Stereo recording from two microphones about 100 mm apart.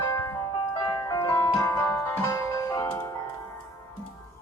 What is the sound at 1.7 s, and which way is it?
Music, 15° left (ahead or behind).